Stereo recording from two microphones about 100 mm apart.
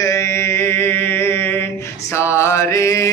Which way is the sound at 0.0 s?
30° left (ahead or behind).